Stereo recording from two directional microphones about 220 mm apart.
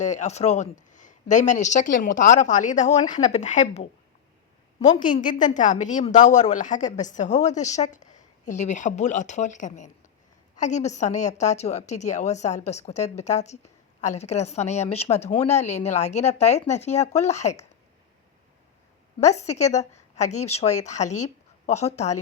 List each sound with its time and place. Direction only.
0.0 s a woman's voice: 30° left (ahead or behind)
19.2 s a woman's voice: 30° left (ahead or behind)